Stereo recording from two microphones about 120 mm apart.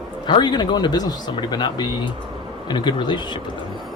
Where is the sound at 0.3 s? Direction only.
40° left (ahead or behind).